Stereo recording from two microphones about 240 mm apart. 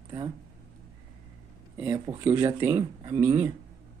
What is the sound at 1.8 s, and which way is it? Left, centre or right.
A man's voice, centre.